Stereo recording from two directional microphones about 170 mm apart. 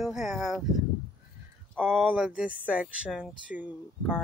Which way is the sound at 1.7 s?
15° right (ahead or behind).